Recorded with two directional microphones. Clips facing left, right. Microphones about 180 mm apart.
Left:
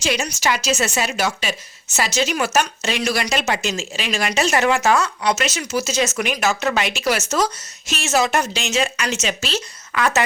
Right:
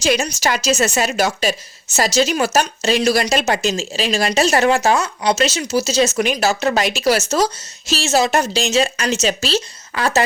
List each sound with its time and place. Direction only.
0.0 s a woman's voice: 40° right (ahead or behind)